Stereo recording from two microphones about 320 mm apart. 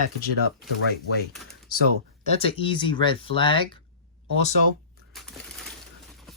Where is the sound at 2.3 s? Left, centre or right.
Centre.